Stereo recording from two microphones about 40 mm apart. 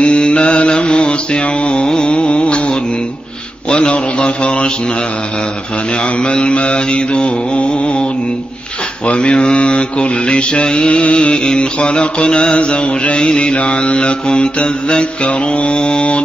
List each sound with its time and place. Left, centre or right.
0.0 s mantra: left
1.9 s a sound: left
3.9 s mantra: left
6.1 s mantra: left
9.0 s mantra: left